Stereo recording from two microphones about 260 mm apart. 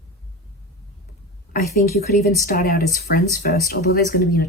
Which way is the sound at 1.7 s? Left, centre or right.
Left.